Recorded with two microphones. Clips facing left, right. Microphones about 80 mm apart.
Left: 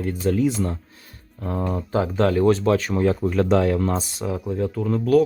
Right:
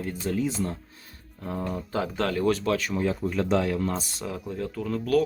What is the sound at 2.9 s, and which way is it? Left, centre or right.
Speech, left.